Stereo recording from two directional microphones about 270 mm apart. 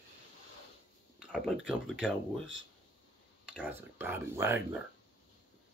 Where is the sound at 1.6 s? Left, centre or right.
Centre.